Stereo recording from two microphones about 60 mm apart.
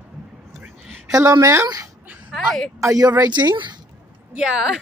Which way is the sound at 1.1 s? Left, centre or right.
Right.